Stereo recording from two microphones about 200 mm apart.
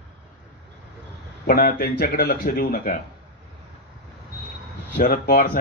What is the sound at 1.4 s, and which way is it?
A man's voice, 45° left (ahead or behind).